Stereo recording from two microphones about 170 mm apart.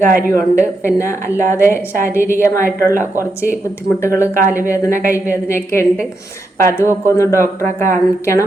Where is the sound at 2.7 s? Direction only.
60° right (ahead or behind).